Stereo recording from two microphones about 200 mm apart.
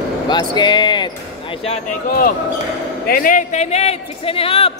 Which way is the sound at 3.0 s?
45° left (ahead or behind).